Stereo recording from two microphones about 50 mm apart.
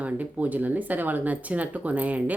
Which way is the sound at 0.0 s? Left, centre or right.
Right.